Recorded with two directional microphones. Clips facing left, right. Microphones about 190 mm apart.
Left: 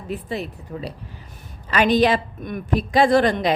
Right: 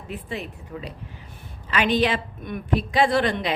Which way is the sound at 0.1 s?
40° left (ahead or behind).